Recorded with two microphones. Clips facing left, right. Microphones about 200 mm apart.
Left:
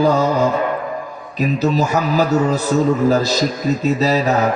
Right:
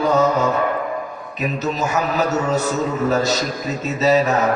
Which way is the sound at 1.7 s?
35° left (ahead or behind).